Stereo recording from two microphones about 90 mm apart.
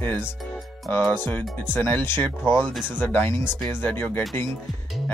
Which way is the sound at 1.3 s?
20° left (ahead or behind).